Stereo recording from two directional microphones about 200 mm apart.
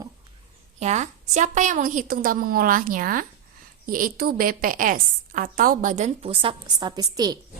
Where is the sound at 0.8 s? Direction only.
35° right (ahead or behind); by 7.3 s 20° right (ahead or behind).